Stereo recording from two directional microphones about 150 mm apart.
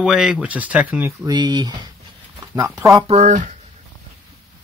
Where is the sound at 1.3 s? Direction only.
25° right (ahead or behind).